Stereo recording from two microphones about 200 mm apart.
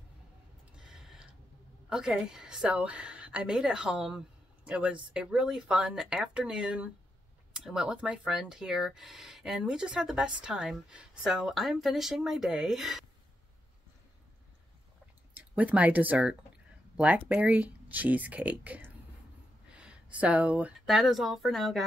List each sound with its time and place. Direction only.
0.7 s a sound: 5° right (ahead or behind)
1.9 s speech: 5° right (ahead or behind)
15.3 s speech: 10° right (ahead or behind)